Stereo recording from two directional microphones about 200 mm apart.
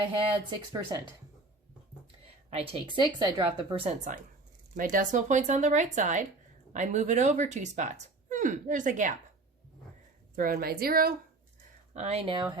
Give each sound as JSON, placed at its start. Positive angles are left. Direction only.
{"t": 0.5, "sound": "a woman's voice", "side_deg": -20}
{"t": 2.2, "sound": "a woman's voice", "side_deg": -30}
{"t": 4.8, "sound": "speech", "side_deg": -40}
{"t": 10.3, "sound": "a woman's voice", "side_deg": -45}
{"t": 11.9, "sound": "a woman's voice", "side_deg": -30}